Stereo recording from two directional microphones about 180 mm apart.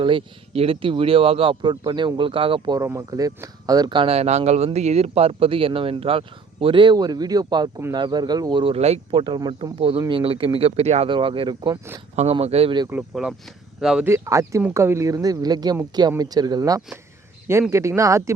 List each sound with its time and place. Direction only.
0.0 s speech: 30° right (ahead or behind)
9.2 s speech: 25° right (ahead or behind)
12.1 s speech: 35° right (ahead or behind)
12.9 s speech: 5° right (ahead or behind)
14.1 s speech: 15° right (ahead or behind)